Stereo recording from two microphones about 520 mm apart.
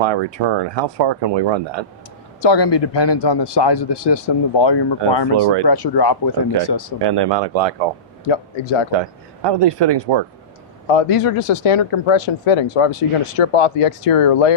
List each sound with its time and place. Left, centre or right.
0.0 s speech: right
2.4 s a man's voice: left
7.0 s speech: right
8.3 s speech: left
8.9 s speech: right
10.8 s speech: left